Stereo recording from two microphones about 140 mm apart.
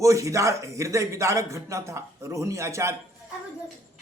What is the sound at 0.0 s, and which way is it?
Speech, 25° right (ahead or behind).